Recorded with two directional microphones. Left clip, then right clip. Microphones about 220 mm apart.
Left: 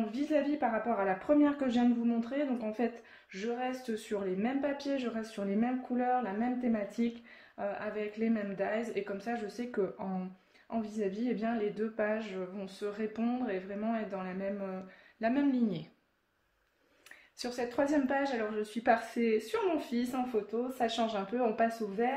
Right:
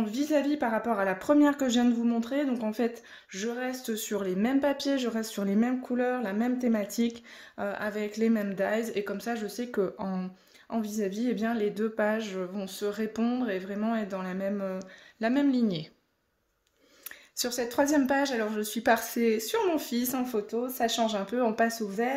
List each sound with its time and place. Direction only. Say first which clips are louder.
0.1 s speech: right 4 dB; 50° right (ahead or behind)
17.4 s speech: right 5 dB; 50° right (ahead or behind)